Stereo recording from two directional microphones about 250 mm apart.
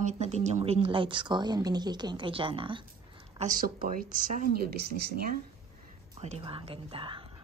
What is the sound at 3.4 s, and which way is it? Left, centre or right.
Speech, right.